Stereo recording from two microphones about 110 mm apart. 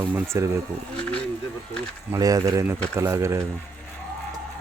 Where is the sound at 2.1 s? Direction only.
30° right (ahead or behind).